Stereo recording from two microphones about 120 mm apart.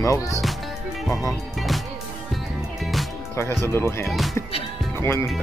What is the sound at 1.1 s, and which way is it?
Speech, 25° left (ahead or behind).